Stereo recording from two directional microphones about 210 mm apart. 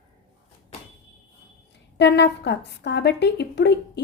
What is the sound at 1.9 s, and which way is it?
A woman's voice, 55° left (ahead or behind).